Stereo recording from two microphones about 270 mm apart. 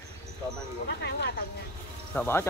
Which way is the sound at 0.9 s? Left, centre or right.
Left.